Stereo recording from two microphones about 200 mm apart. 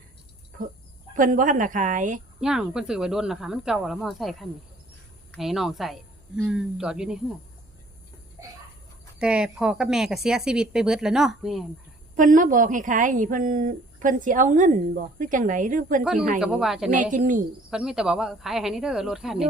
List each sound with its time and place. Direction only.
1.1 s a woman's voice: 40° right (ahead or behind)
2.4 s speech: 5° right (ahead or behind)
9.2 s speech: 5° right (ahead or behind)
12.1 s a woman's voice: 40° right (ahead or behind)
16.4 s speech: centre (ahead or behind)
16.9 s a woman's voice: 40° right (ahead or behind)
17.7 s speech: 5° right (ahead or behind)